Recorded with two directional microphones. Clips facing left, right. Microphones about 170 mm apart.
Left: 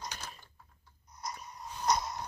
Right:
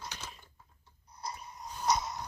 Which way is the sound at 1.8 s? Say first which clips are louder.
Even; centre (ahead or behind).